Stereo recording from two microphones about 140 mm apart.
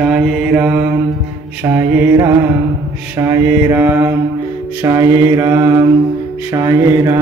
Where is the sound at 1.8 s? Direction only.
20° right (ahead or behind).